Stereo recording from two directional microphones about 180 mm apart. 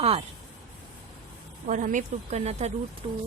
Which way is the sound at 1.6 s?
45° right (ahead or behind).